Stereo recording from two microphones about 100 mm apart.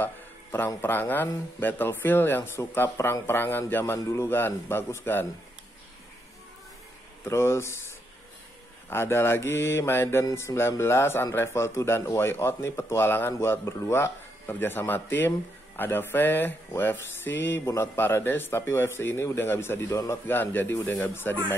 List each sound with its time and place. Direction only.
0.0 s a sound: 20° left (ahead or behind)
0.7 s speech: 20° left (ahead or behind)
7.2 s speech: 25° left (ahead or behind)
8.8 s speech: 25° left (ahead or behind)